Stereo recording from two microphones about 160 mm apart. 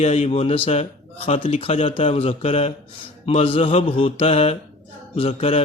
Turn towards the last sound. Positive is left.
turn(degrees=40)  # may be behind; listen again after turning